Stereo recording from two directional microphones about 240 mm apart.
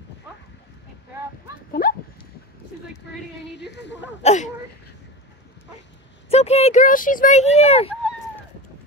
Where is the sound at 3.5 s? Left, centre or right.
Left.